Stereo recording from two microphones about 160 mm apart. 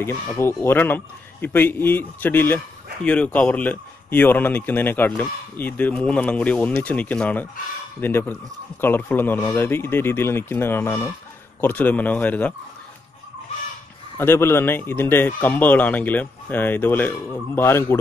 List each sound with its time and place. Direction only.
0.0 s a man's voice: 15° left (ahead or behind)
14.1 s a man's voice: 15° left (ahead or behind)